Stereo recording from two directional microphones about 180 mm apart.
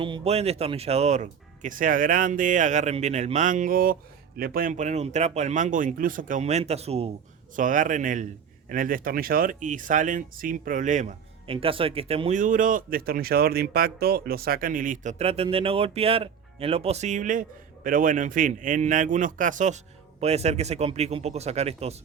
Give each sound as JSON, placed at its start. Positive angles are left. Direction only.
{"t": 0.0, "sound": "a man's voice", "side_deg": -30}
{"t": 7.5, "sound": "speech", "side_deg": -45}
{"t": 12.4, "sound": "a man's voice", "side_deg": -50}